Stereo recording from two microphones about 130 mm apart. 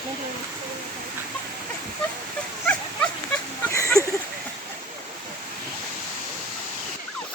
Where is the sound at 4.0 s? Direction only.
5° left (ahead or behind).